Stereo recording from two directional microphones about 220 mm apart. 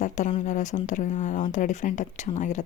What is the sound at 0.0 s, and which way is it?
Speech, 35° left (ahead or behind).